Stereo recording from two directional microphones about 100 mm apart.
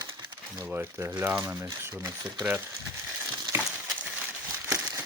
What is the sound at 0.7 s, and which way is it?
Speech, 20° right (ahead or behind).